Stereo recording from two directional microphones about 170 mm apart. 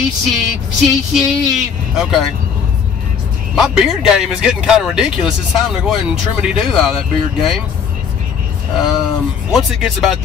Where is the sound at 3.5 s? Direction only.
5° right (ahead or behind).